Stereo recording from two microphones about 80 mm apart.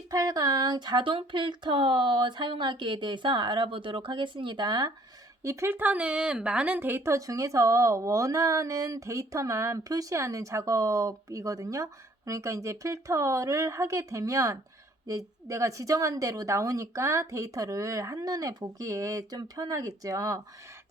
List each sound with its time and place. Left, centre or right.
0.1 s speech: right
5.4 s speech: right; by 6.7 s centre
6.7 s a woman's voice: right